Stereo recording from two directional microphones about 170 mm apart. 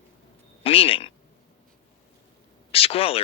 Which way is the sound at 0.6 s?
35° left (ahead or behind).